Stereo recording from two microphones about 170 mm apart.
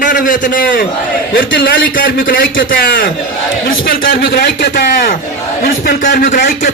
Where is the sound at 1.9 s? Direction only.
55° left (ahead or behind).